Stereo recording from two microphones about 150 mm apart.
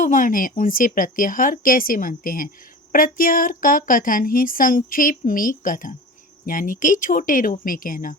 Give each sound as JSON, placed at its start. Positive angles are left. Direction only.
{"t": 0.0, "sound": "a woman's voice", "side_deg": 60}